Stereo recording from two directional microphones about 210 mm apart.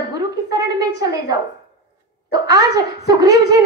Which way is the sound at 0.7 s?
15° right (ahead or behind).